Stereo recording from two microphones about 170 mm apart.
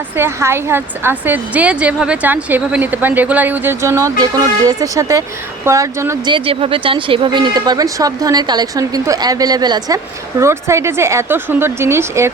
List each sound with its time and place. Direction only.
0.2 s speech: 15° right (ahead or behind)
6.3 s speech: 35° right (ahead or behind); by 12.3 s 15° right (ahead or behind)